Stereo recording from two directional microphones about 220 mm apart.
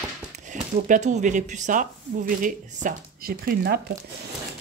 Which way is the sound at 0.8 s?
35° right (ahead or behind).